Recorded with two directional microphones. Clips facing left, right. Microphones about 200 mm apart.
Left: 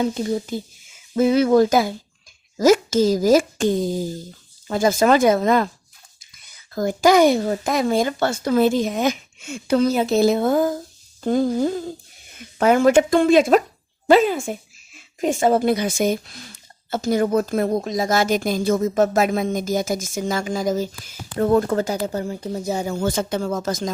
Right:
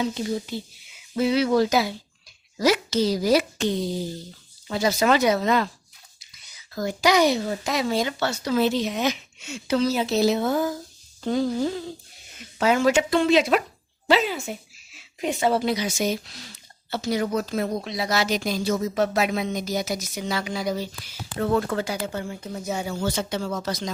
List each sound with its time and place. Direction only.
0.0 s speech: 45° left (ahead or behind)